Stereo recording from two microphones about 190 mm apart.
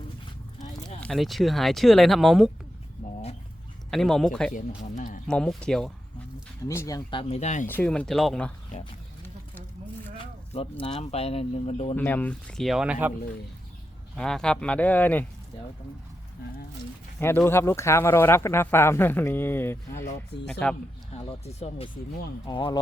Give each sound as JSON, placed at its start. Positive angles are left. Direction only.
{"t": 1.0, "sound": "speech", "side_deg": 0}
{"t": 3.9, "sound": "speech", "side_deg": 0}
{"t": 4.5, "sound": "speech", "side_deg": 45}
{"t": 5.3, "sound": "speech", "side_deg": 5}
{"t": 6.7, "sound": "speech", "side_deg": 15}
{"t": 7.7, "sound": "speech", "side_deg": 5}
{"t": 10.5, "sound": "speech", "side_deg": 30}
{"t": 11.9, "sound": "speech", "side_deg": 10}
{"t": 14.2, "sound": "speech", "side_deg": 5}
{"t": 17.2, "sound": "speech", "side_deg": 10}
{"t": 21.4, "sound": "speech", "side_deg": 35}